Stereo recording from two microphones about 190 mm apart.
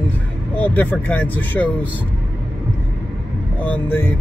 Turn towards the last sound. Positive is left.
turn(degrees=10)  # may be behind; listen again after turning